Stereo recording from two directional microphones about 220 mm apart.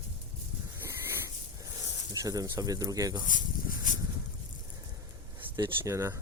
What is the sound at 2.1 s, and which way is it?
Speech, 15° right (ahead or behind).